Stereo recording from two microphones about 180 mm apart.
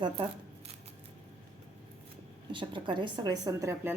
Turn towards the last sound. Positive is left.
turn(degrees=-15)  # may be behind; listen again after turning